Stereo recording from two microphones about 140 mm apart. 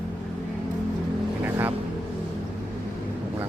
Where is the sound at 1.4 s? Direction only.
15° right (ahead or behind).